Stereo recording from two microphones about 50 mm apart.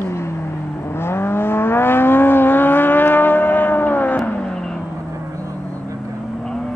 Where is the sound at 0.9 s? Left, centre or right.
Left.